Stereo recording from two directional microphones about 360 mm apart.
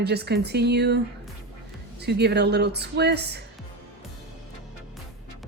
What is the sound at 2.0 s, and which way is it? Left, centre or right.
A woman's voice, right.